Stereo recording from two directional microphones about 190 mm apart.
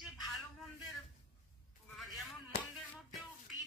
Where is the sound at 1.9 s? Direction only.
Centre (ahead or behind).